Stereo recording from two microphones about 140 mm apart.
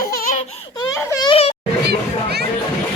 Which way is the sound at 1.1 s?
30° left (ahead or behind).